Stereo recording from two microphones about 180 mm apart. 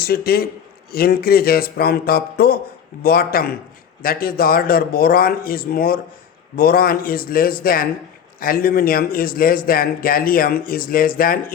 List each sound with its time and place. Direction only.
0.0 s a man's voice: 55° left (ahead or behind)